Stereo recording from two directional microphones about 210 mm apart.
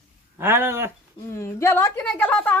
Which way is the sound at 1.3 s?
15° left (ahead or behind).